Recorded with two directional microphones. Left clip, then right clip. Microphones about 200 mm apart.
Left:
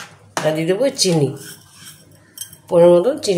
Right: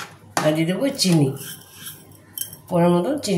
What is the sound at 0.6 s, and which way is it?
Speech, 45° left (ahead or behind).